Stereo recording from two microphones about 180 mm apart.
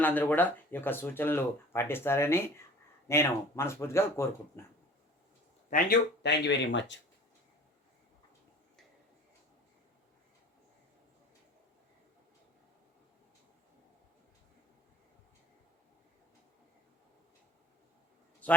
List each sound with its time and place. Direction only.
0.0 s speech: 10° left (ahead or behind)
5.7 s speech: 60° left (ahead or behind); by 7.0 s 85° left